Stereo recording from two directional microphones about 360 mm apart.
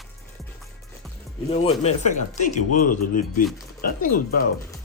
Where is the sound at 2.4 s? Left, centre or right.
Left.